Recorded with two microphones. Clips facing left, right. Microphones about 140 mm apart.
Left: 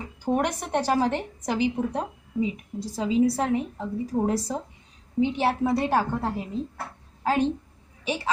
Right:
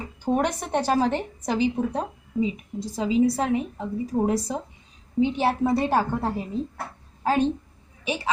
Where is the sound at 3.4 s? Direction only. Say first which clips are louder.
Right 1 dB; 15° right (ahead or behind).